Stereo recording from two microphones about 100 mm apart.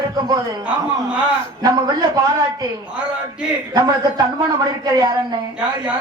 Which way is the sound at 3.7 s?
40° right (ahead or behind).